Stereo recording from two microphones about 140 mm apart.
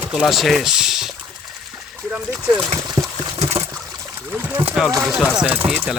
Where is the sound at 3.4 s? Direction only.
50° right (ahead or behind).